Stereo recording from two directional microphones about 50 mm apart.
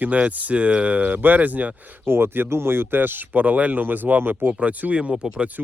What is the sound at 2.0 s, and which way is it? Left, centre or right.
Speech, right.